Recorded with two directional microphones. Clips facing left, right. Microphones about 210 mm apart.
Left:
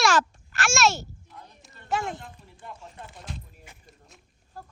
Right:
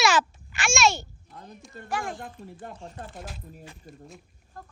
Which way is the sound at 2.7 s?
40° right (ahead or behind).